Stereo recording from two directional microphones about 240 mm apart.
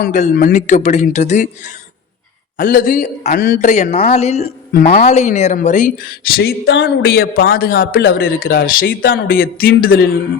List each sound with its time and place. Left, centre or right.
0.0 s a woman's voice: left